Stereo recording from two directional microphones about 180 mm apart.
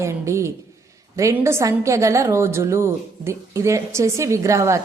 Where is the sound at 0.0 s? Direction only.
15° right (ahead or behind).